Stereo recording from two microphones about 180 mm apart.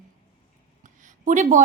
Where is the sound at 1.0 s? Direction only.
45° right (ahead or behind).